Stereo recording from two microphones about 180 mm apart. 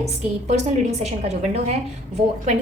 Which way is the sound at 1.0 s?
35° right (ahead or behind).